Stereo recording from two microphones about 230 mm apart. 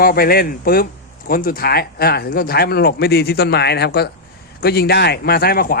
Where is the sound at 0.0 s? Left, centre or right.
Left.